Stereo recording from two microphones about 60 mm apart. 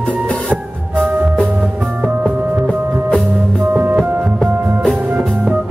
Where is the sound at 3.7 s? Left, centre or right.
Right.